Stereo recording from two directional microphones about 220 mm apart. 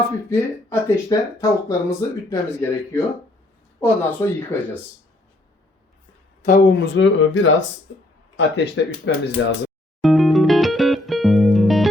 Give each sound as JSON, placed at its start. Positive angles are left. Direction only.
{"t": 0.3, "sound": "speech", "side_deg": 15}
{"t": 6.4, "sound": "speech", "side_deg": 35}
{"t": 6.8, "sound": "speech", "side_deg": 55}
{"t": 10.0, "sound": "music", "side_deg": 0}